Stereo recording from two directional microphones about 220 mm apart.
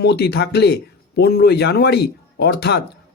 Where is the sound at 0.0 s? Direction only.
50° left (ahead or behind).